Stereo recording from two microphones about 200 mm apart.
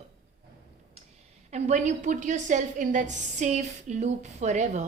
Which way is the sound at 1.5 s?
35° right (ahead or behind).